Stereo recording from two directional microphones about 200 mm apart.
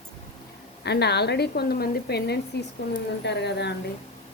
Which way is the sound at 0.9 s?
55° left (ahead or behind).